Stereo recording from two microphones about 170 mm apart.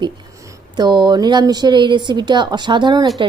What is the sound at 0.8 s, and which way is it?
A woman's voice, 25° right (ahead or behind).